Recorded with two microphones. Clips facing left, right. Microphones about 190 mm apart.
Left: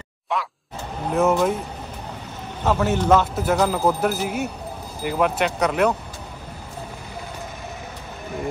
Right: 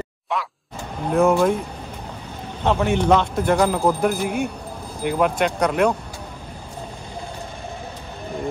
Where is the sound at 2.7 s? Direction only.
5° left (ahead or behind).